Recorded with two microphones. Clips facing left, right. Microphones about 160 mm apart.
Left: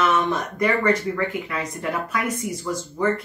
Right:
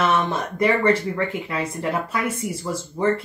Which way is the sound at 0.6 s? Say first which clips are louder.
Right 3 dB; 25° right (ahead or behind).